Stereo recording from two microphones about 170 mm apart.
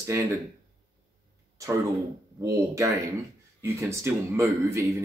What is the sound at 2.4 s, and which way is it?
Speech, 20° right (ahead or behind).